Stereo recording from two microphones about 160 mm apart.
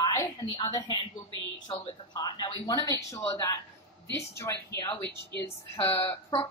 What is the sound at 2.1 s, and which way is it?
A woman's voice, 25° left (ahead or behind).